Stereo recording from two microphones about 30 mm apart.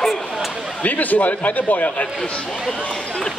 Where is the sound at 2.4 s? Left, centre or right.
Centre.